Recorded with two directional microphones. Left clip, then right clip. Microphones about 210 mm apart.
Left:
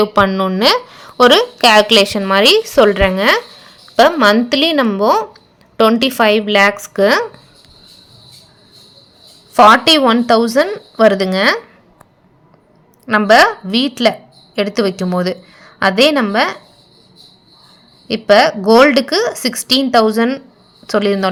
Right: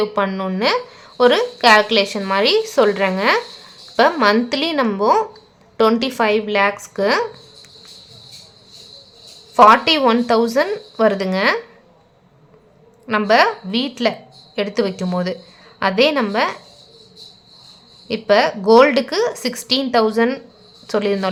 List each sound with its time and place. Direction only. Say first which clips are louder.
0.0 s a woman's voice: left 7 dB; 25° left (ahead or behind)
9.6 s a woman's voice: left 3 dB; 20° left (ahead or behind)
13.1 s a woman's voice: left 5 dB; 20° left (ahead or behind)
18.1 s a woman's voice: left 5 dB; 20° left (ahead or behind)